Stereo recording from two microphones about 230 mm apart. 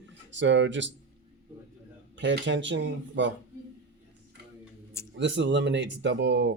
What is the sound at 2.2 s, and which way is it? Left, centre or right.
Speech, right.